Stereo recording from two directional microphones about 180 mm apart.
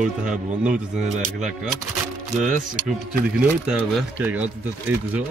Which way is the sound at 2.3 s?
45° right (ahead or behind).